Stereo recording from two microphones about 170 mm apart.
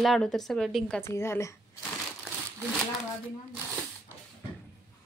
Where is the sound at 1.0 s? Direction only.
15° left (ahead or behind).